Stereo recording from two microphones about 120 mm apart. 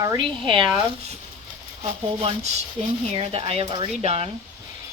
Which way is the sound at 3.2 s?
55° right (ahead or behind).